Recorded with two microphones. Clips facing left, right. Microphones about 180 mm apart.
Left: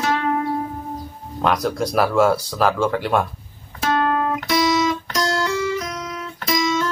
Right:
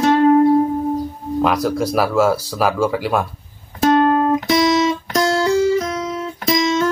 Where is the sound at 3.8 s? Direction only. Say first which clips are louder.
Right 6 dB; 30° right (ahead or behind).